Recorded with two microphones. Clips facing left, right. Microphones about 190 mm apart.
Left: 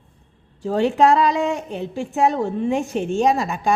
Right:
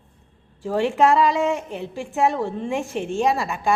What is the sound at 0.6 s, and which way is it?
A woman's voice, 20° left (ahead or behind).